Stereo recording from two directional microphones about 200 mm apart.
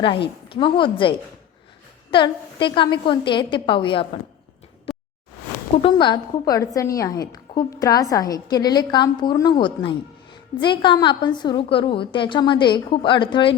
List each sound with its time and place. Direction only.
0.0 s a woman's voice: 25° left (ahead or behind)
4.9 s a sound: centre (ahead or behind)
5.8 s a woman's voice: 25° left (ahead or behind)